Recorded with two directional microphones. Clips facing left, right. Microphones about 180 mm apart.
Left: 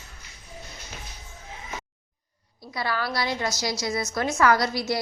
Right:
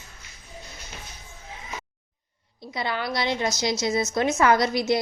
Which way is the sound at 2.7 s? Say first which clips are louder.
Even; 20° right (ahead or behind).